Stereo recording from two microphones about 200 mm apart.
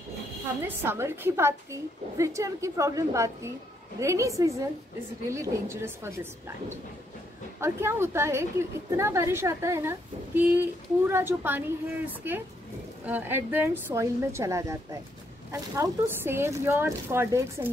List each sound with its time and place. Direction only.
0.6 s a woman's voice: 10° right (ahead or behind)
7.6 s a woman's voice: 15° right (ahead or behind)